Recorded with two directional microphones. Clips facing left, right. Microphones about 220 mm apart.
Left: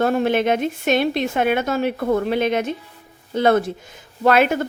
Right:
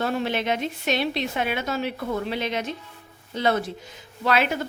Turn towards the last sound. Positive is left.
turn(degrees=50)  # may be behind; listen again after turning